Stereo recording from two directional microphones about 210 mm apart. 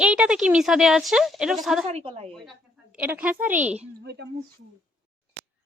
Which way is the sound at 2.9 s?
5° right (ahead or behind).